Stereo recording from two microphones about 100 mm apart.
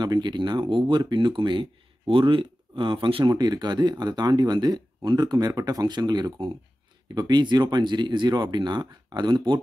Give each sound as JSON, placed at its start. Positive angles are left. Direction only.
{"t": 0.0, "sound": "speech", "side_deg": -45}
{"t": 3.3, "sound": "speech", "side_deg": -45}